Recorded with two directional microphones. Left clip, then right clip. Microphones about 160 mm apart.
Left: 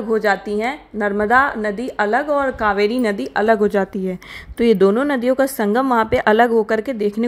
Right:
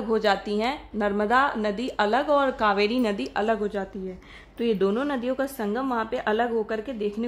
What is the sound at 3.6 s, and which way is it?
A woman's voice, 40° left (ahead or behind).